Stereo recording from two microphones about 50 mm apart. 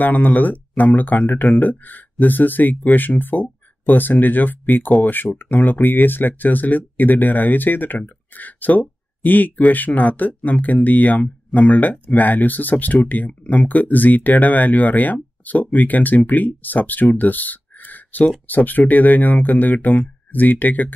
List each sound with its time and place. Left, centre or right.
0.0 s speech: left